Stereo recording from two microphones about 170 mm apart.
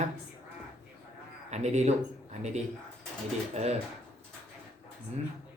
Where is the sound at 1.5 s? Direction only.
40° right (ahead or behind).